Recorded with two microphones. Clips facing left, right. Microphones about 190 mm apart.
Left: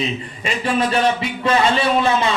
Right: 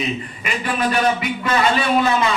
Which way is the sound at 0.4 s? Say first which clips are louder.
Left 2 dB; 30° left (ahead or behind).